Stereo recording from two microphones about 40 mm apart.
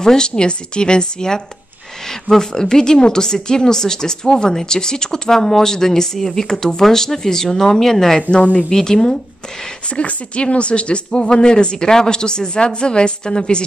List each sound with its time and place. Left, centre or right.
0.0 s a woman's voice: centre
9.9 s speech: left